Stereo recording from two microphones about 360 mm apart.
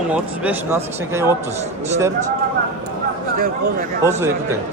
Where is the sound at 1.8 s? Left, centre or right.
Centre.